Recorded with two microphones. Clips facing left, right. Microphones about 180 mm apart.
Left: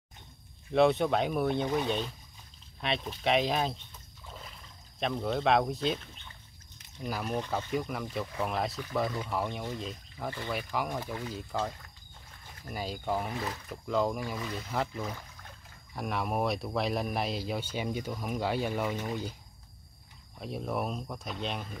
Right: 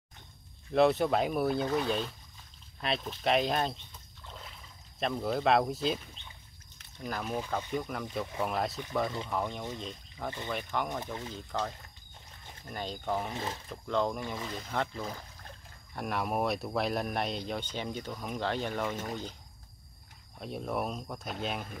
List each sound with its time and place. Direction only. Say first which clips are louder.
0.7 s speech: even; centre (ahead or behind)
4.3 s a sound: left 1 dB; centre (ahead or behind)
7.0 s speech: left 1 dB; 5° left (ahead or behind)
13.3 s speech: left 1 dB; 25° right (ahead or behind)
13.7 s speech: left 1 dB; 5° left (ahead or behind)
20.3 s speech: even; centre (ahead or behind)